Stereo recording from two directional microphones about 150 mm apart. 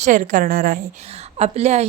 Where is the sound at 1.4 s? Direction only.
45° right (ahead or behind).